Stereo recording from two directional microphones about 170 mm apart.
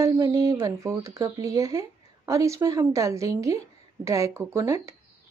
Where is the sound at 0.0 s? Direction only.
20° right (ahead or behind).